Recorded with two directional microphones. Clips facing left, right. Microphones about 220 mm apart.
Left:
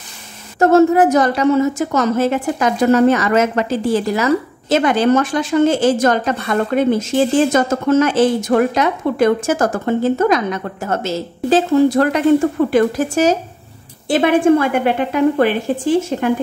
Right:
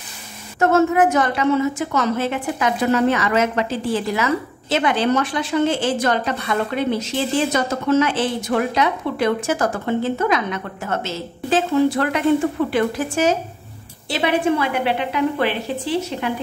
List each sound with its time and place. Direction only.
0.6 s a woman's voice: 35° left (ahead or behind)